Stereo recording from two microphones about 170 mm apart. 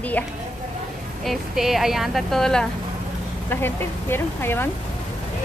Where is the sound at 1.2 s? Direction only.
Centre (ahead or behind).